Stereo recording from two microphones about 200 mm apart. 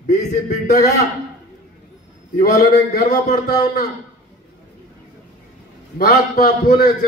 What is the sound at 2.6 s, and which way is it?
Speech, 40° left (ahead or behind).